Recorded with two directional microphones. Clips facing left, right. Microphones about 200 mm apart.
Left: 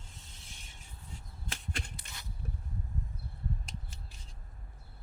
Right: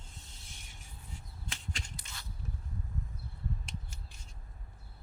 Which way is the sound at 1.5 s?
55° left (ahead or behind).